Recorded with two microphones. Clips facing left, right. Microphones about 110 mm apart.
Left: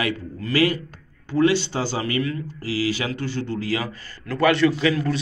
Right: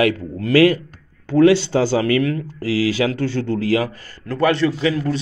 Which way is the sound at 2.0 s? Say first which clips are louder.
Right 7 dB; 90° right.